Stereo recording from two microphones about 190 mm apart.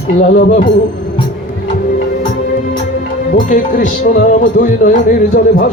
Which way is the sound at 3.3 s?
45° left (ahead or behind).